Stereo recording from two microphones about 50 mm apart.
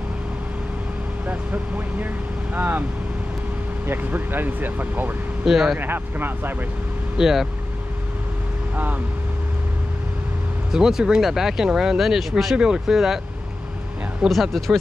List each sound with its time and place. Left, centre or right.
1.2 s speech: right
3.8 s speech: right
5.4 s speech: centre
5.8 s speech: right
7.2 s speech: centre
10.7 s speech: centre
12.5 s speech: centre
14.3 s speech: centre